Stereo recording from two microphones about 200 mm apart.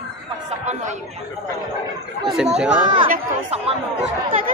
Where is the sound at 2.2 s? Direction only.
5° right (ahead or behind).